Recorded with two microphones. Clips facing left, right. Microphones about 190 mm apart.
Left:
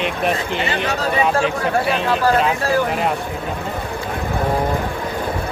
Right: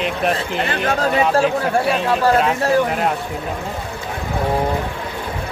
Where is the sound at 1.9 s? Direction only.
Centre (ahead or behind).